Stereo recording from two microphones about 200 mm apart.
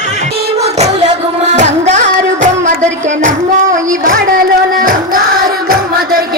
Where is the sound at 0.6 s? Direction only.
30° right (ahead or behind).